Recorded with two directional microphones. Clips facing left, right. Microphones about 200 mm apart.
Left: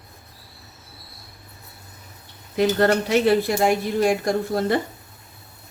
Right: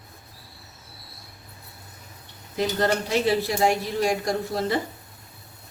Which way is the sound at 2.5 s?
60° left (ahead or behind).